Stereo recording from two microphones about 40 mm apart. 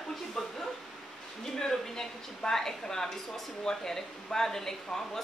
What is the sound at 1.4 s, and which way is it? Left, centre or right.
Speech, centre.